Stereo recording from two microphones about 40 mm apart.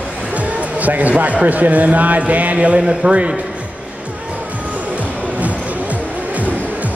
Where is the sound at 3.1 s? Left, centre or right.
Right.